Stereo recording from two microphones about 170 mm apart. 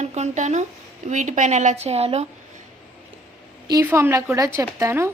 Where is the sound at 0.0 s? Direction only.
40° right (ahead or behind).